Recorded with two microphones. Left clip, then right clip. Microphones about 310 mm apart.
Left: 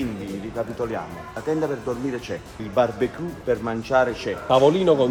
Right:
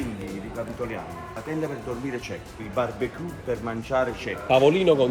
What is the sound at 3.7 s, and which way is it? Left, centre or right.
Speech, centre.